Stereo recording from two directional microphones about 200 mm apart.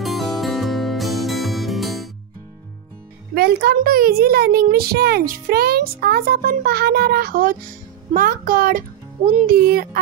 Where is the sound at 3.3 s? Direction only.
50° right (ahead or behind).